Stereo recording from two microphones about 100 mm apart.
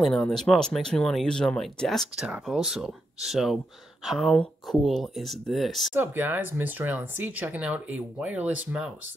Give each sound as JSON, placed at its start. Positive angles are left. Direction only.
{"t": 0.2, "sound": "speech", "side_deg": 5}
{"t": 5.9, "sound": "speech", "side_deg": -20}